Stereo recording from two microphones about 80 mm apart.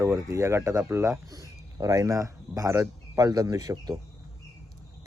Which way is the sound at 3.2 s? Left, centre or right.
Right.